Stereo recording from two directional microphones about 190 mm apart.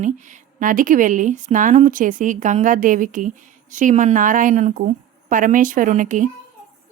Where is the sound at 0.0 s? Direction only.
40° right (ahead or behind).